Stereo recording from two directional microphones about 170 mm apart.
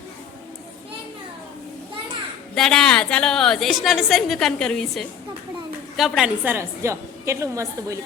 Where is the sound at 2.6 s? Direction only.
5° left (ahead or behind).